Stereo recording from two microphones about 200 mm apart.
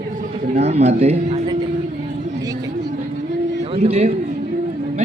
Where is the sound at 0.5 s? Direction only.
30° right (ahead or behind).